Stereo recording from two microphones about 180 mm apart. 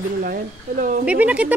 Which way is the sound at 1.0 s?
5° right (ahead or behind).